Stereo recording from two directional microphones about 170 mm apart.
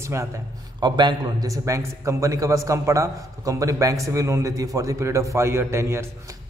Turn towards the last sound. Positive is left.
turn(degrees=-15)  # may be behind; listen again after turning